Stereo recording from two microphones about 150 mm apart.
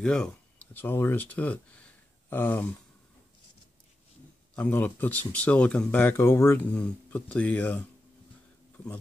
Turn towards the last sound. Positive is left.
turn(degrees=10)  # may be behind; listen again after turning